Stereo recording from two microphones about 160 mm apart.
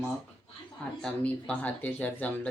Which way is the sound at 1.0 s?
5° left (ahead or behind).